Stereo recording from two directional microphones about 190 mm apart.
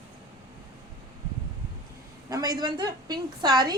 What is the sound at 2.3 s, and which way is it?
A woman's voice, 20° right (ahead or behind).